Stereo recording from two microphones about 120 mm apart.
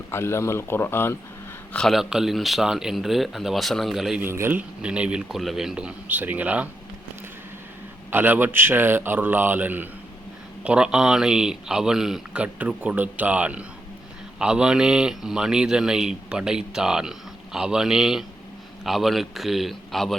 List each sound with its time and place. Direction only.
0.1 s speech: 20° left (ahead or behind)
1.7 s a man's voice: 5° left (ahead or behind)
4.2 s a man's voice: 20° right (ahead or behind)
8.1 s a man's voice: 15° right (ahead or behind); by 20.1 s centre (ahead or behind)